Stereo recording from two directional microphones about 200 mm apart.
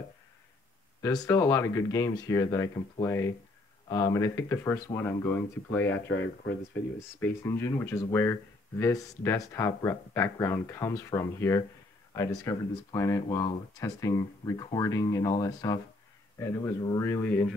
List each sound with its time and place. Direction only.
1.0 s speech: 15° left (ahead or behind)
5.9 s speech: 65° left (ahead or behind)
7.0 s speech: 15° left (ahead or behind)